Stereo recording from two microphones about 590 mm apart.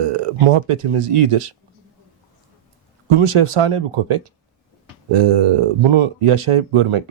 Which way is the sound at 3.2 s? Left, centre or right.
Right.